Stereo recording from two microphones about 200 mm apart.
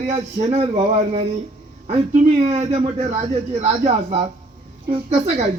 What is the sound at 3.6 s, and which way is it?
A man's voice, 30° right (ahead or behind).